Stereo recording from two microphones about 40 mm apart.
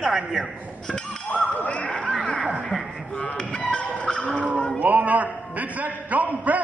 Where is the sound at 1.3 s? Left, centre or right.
Left.